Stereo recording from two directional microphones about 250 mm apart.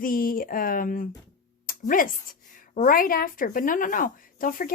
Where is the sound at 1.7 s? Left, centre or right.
Left.